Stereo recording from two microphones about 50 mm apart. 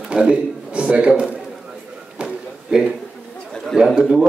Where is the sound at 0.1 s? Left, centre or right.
Centre.